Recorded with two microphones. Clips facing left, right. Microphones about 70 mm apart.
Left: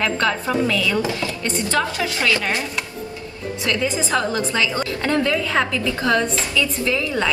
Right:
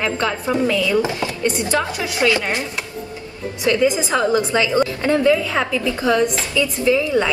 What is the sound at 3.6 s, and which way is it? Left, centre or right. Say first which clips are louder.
A woman's voice: right 6 dB; right.